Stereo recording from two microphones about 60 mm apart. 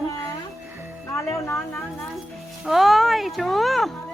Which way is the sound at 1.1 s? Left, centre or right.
Left.